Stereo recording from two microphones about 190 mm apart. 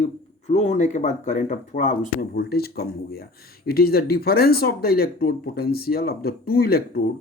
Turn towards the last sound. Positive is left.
turn(degrees=55)  # may be behind; listen again after turning